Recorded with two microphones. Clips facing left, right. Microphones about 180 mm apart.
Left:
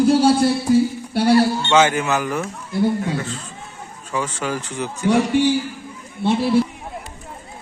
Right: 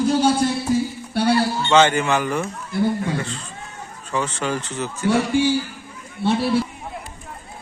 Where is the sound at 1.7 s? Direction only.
5° left (ahead or behind).